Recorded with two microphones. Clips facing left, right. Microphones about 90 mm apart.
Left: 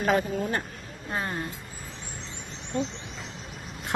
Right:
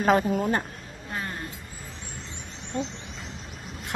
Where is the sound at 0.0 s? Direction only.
40° right (ahead or behind).